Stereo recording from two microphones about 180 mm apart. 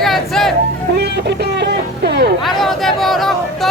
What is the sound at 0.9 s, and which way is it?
Music, 65° right (ahead or behind).